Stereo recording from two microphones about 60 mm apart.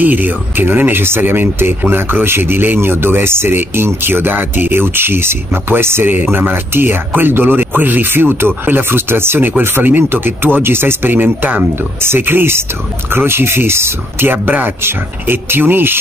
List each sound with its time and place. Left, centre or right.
0.0 s speech: right